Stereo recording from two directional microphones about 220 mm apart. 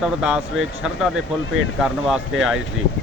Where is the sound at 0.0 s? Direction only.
Centre (ahead or behind).